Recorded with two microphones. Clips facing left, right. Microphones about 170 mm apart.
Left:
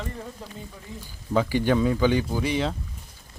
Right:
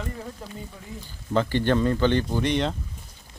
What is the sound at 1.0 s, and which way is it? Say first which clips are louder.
Speech: even; 10° left (ahead or behind).